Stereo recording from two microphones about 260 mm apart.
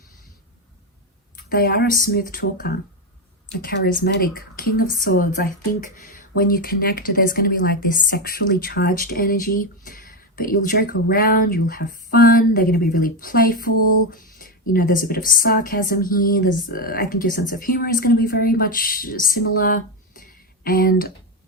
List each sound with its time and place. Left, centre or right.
1.4 s speech: left